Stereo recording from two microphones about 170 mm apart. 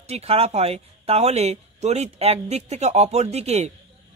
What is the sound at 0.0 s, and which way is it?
A man's voice, 40° right (ahead or behind).